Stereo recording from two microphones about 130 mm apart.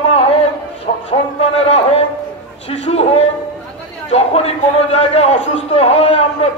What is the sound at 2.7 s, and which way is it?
A man's voice, 55° left (ahead or behind).